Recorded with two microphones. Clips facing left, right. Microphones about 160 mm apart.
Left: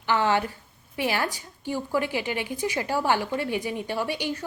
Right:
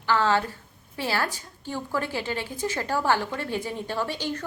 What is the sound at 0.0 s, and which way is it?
A woman's voice, 15° left (ahead or behind).